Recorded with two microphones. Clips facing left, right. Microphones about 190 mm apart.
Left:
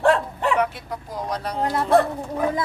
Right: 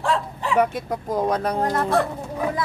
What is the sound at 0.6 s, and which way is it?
Speech, 45° right (ahead or behind).